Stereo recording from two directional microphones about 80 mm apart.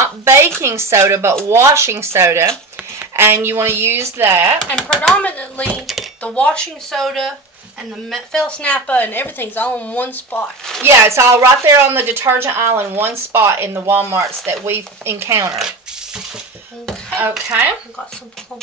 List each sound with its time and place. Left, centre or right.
0.0 s a woman's voice: right
3.0 s a woman's voice: right
4.6 s speech: centre
5.8 s speech: centre
6.2 s a woman's voice: centre
10.8 s a woman's voice: right
17.5 s speech: right